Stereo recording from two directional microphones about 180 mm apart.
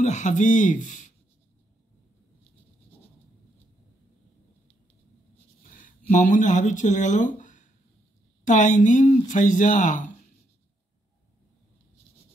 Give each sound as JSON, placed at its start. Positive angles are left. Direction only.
{"t": 0.0, "sound": "speech", "side_deg": 40}
{"t": 5.8, "sound": "speech", "side_deg": 45}